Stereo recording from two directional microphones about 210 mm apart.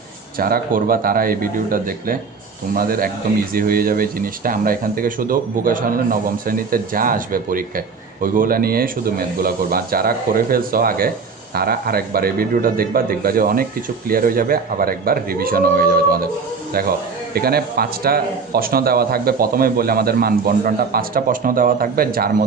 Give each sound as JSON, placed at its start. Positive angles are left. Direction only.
{"t": 0.3, "sound": "speech", "side_deg": -45}
{"t": 17.3, "sound": "speech", "side_deg": -45}